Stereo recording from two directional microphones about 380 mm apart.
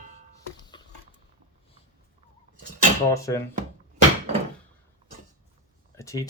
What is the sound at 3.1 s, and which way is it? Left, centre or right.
Speech, centre.